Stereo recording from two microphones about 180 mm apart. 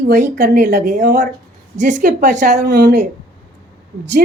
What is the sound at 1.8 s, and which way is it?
Speech, 40° right (ahead or behind).